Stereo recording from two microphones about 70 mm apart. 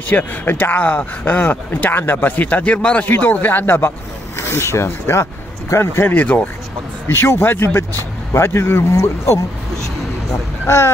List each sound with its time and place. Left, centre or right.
0.1 s speech: left
3.1 s speech: left
7.1 s speech: left